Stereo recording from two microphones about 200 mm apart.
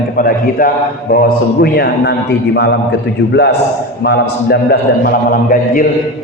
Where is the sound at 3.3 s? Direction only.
55° left (ahead or behind).